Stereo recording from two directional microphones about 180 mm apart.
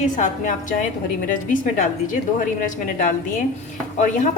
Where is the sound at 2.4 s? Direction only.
45° left (ahead or behind).